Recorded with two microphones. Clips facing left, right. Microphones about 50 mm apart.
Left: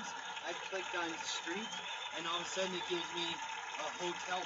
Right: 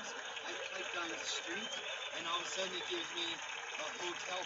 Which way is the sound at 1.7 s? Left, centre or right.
Right.